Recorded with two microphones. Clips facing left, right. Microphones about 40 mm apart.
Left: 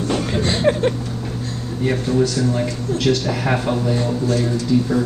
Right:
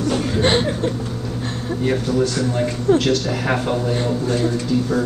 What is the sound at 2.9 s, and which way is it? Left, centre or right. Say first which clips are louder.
Speech: right 11 dB; right.